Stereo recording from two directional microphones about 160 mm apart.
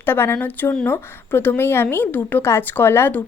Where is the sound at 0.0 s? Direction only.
15° left (ahead or behind).